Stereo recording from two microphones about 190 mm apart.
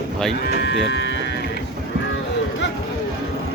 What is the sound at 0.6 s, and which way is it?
Speech, 70° left (ahead or behind).